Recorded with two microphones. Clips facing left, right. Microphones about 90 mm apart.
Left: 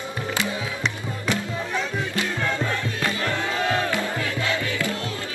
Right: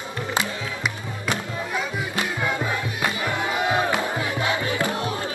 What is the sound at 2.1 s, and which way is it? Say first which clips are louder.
Music: right 1 dB; 15° right (ahead or behind).